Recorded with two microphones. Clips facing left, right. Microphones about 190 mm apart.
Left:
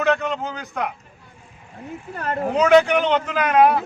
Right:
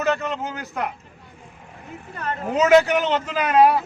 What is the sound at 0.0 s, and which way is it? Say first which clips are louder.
Speech: left 2 dB; centre (ahead or behind).